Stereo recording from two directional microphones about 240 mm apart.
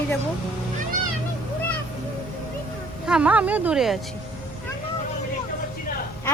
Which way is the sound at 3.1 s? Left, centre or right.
Centre.